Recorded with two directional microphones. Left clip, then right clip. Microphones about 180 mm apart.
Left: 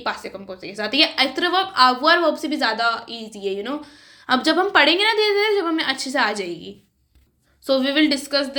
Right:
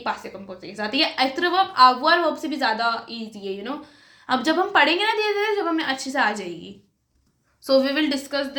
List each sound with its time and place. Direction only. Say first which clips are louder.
0.0 s speech: left 1 dB; 40° left (ahead or behind)
7.7 s a woman's voice: left 1 dB; 25° left (ahead or behind)